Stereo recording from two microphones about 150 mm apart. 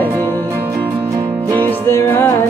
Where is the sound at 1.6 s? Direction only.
15° left (ahead or behind).